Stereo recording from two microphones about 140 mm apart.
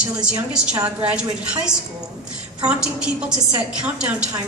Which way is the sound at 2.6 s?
10° right (ahead or behind).